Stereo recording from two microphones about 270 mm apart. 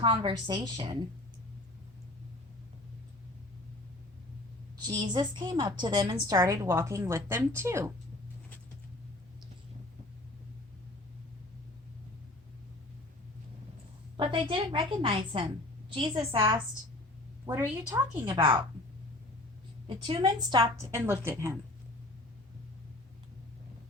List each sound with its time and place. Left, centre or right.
0.0 s a woman's voice: centre
4.8 s a woman's voice: centre
14.2 s a woman's voice: centre
19.9 s a woman's voice: centre